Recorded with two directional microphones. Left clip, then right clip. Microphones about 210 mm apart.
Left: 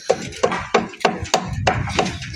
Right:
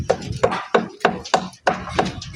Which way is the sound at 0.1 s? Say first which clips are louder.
Even; 45° left (ahead or behind).